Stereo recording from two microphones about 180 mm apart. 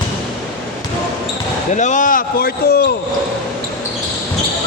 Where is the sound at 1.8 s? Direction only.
45° left (ahead or behind).